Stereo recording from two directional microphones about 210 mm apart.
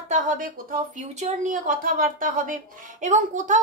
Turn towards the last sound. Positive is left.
turn(degrees=-35)  # may be behind; listen again after turning